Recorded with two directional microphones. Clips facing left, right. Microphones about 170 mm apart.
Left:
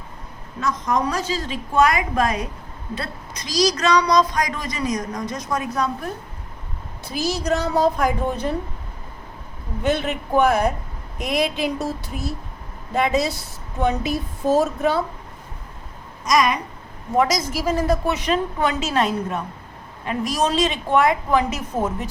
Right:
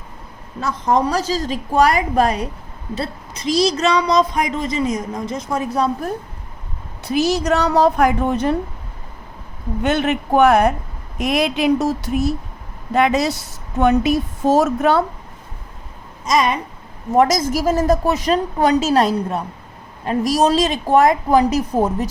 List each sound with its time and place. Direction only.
0.6 s a woman's voice: 30° right (ahead or behind)
7.0 s a woman's voice: 70° right (ahead or behind)
9.8 s a woman's voice: 70° right (ahead or behind)
16.2 s speech: 25° right (ahead or behind)
17.2 s a woman's voice: 45° right (ahead or behind)